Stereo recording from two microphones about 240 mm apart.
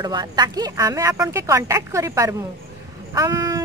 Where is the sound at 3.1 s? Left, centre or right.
Centre.